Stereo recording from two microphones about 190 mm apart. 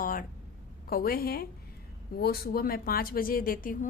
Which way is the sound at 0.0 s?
45° left (ahead or behind).